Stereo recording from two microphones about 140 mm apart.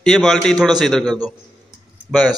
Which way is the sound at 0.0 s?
Centre (ahead or behind).